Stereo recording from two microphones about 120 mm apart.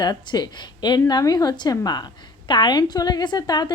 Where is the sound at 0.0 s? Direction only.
35° left (ahead or behind).